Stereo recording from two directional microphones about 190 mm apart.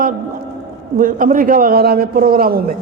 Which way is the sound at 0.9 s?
45° right (ahead or behind).